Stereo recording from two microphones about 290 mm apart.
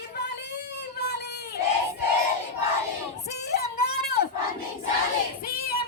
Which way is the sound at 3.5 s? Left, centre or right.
Left.